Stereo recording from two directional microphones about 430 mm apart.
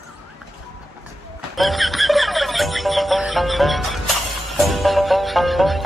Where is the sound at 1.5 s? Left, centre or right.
Centre.